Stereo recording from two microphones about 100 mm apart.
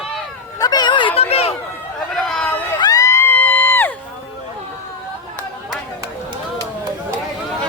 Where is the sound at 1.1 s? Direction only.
90° left.